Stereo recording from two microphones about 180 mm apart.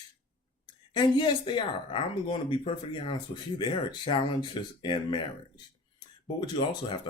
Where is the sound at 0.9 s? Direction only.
25° left (ahead or behind).